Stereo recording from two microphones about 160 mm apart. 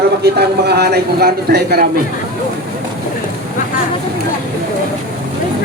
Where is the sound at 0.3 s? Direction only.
85° right.